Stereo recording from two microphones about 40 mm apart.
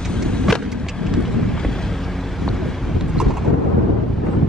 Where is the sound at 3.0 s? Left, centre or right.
Centre.